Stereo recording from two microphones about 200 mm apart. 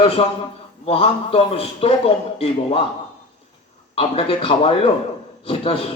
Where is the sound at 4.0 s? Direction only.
30° left (ahead or behind).